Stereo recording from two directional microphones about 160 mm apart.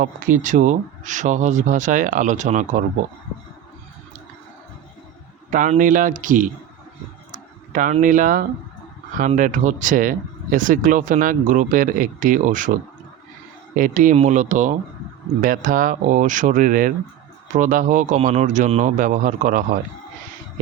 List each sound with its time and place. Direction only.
0.0 s speech: 55° right (ahead or behind)
5.5 s speech: 55° right (ahead or behind)
7.3 s a sound: 55° right (ahead or behind)
8.0 s speech: 55° right (ahead or behind)
13.7 s speech: 55° right (ahead or behind)